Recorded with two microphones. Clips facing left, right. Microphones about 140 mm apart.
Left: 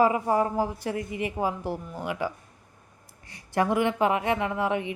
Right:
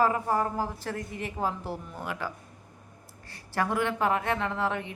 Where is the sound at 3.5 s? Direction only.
20° left (ahead or behind).